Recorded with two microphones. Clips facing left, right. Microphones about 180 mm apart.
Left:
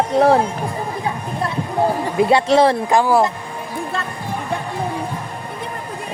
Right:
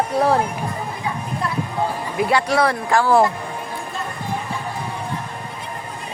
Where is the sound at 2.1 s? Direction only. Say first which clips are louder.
Left 4 dB; 25° left (ahead or behind).